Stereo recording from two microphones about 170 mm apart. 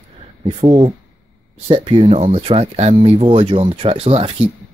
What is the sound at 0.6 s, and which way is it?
Speech, 25° right (ahead or behind).